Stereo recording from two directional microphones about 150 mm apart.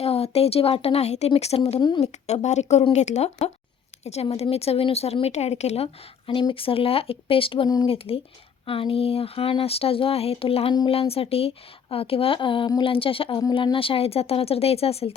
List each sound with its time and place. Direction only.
0.0 s a woman's voice: 40° left (ahead or behind)
1.8 s speech: 30° left (ahead or behind)
2.1 s a woman's voice: 50° left (ahead or behind)